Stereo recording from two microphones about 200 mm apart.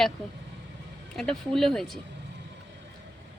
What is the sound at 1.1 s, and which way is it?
Speech, centre (ahead or behind).